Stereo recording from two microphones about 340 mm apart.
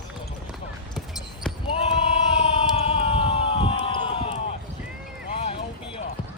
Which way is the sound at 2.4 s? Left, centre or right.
Centre.